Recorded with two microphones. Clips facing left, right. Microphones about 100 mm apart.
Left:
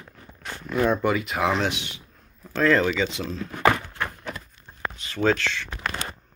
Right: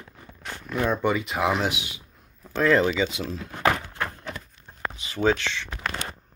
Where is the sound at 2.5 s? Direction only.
15° right (ahead or behind).